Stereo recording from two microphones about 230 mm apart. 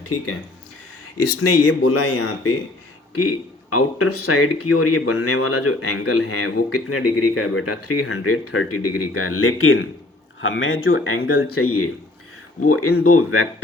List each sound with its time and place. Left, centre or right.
1.4 s speech: left